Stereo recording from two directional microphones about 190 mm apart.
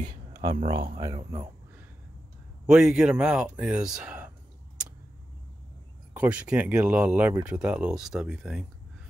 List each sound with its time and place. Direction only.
0.1 s speech: 20° right (ahead or behind)
2.6 s speech: centre (ahead or behind)
6.1 s speech: 5° right (ahead or behind)